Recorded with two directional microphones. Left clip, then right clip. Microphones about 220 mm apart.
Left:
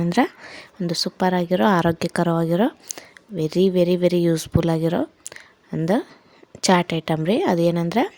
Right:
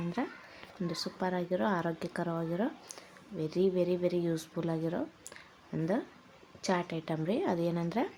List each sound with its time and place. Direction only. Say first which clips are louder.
0.1 s speech: left 16 dB; 45° left (ahead or behind)